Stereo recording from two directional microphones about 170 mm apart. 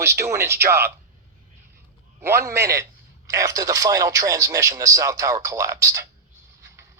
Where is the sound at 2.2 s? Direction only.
15° right (ahead or behind).